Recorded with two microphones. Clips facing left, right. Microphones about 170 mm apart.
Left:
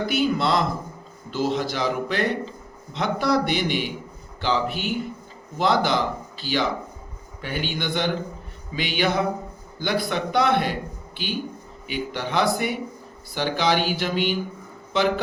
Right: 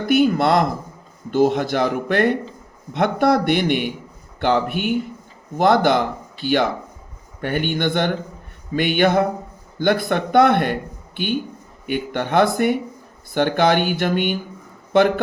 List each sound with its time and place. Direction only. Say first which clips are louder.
0.0 s speech: right 6 dB; 55° right (ahead or behind)
11.9 s speech: right 6 dB; 55° right (ahead or behind)